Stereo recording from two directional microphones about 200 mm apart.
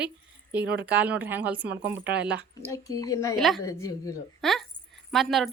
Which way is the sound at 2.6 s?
15° left (ahead or behind).